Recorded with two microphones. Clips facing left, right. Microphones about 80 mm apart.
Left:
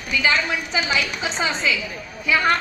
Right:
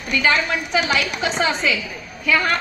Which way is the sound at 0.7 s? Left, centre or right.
Right.